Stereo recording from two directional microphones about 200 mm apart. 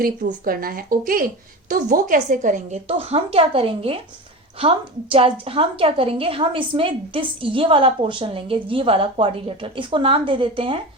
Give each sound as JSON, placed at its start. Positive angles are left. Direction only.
{"t": 0.0, "sound": "a woman's voice", "side_deg": -45}
{"t": 5.1, "sound": "a woman's voice", "side_deg": -30}